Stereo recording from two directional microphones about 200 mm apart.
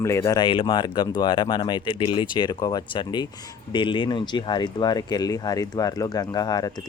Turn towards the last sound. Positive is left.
turn(degrees=20)  # may be behind; listen again after turning